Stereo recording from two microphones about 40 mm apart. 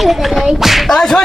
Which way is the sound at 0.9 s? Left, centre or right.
Centre.